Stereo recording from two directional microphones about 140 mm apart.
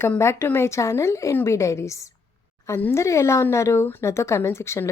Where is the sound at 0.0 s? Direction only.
20° left (ahead or behind).